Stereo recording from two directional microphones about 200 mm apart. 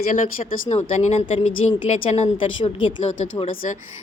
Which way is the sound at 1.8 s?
35° left (ahead or behind).